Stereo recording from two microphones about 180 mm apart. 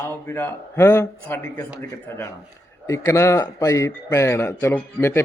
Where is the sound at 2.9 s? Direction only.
15° left (ahead or behind).